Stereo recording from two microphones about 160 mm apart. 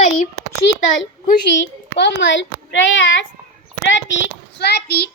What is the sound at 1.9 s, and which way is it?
Speech, 90° left.